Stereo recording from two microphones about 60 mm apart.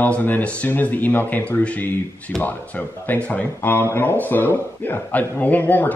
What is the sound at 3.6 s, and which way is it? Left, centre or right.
Speech, left.